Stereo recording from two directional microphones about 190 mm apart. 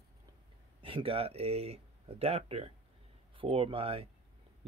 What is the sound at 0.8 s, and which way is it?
Speech, 30° right (ahead or behind).